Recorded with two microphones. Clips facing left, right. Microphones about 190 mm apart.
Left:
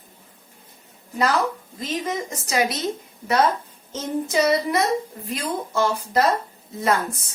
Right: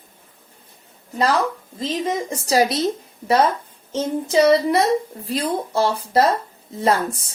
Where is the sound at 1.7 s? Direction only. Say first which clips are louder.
Right 5 dB; 30° right (ahead or behind).